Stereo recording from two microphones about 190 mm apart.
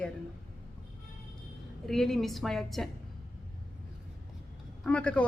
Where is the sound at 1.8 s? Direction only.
Centre (ahead or behind).